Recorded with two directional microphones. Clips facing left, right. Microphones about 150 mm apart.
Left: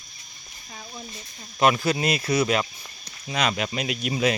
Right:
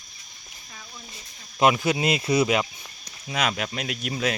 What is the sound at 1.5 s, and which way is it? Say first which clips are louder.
Speech: even; 15° right (ahead or behind).